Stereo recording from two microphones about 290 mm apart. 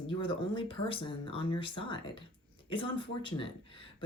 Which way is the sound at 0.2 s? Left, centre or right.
Centre.